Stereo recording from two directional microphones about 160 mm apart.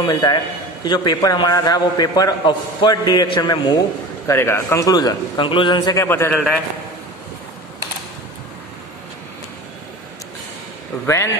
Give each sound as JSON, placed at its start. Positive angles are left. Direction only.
{"t": 0.0, "sound": "a man's voice", "side_deg": 25}
{"t": 4.3, "sound": "a man's voice", "side_deg": 15}
{"t": 6.0, "sound": "a man's voice", "side_deg": 15}